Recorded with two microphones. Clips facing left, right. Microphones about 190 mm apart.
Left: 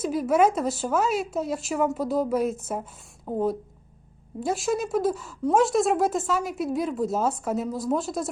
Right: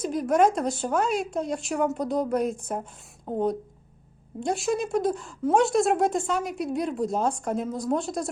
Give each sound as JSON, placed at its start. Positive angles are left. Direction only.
{"t": 0.0, "sound": "speech", "side_deg": 5}